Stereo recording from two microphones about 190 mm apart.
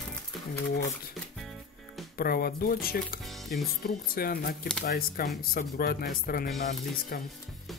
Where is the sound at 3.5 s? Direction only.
55° left (ahead or behind).